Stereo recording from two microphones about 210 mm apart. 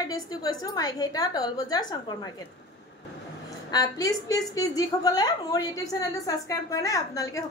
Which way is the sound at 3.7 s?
15° left (ahead or behind).